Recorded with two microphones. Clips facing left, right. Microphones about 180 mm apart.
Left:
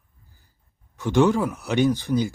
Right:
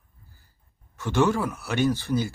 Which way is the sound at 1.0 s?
15° left (ahead or behind).